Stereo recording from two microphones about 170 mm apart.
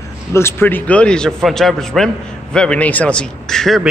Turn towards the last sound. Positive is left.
turn(degrees=0)  # may be behind; listen again after turning